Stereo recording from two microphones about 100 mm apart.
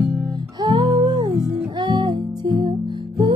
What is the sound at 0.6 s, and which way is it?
Music, 40° right (ahead or behind).